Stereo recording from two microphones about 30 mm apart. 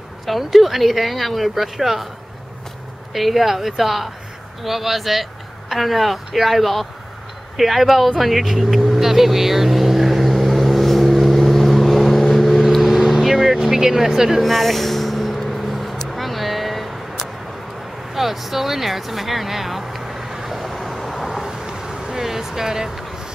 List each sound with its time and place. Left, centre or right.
0.4 s speech: centre
3.1 s speech: centre
8.2 s vehicle: centre
13.6 s vehicle: centre
14.4 s a sound: centre
20.4 s vehicle: centre
21.4 s vehicle: centre